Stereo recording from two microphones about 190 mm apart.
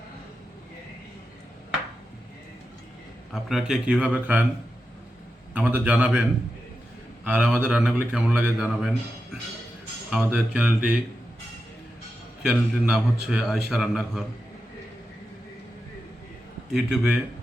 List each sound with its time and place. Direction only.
3.3 s a man's voice: centre (ahead or behind)
5.5 s speech: 10° right (ahead or behind)
7.3 s a man's voice: 5° right (ahead or behind)
10.1 s speech: 5° right (ahead or behind)
12.4 s a man's voice: 5° right (ahead or behind)
16.7 s a man's voice: 5° right (ahead or behind)